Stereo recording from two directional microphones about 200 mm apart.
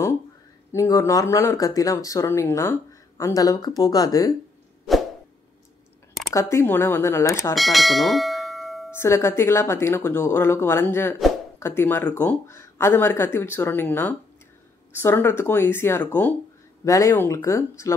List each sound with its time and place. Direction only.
0.7 s speech: 15° left (ahead or behind)
6.3 s speech: 10° left (ahead or behind)
7.5 s bell: centre (ahead or behind)
8.9 s speech: 15° left (ahead or behind)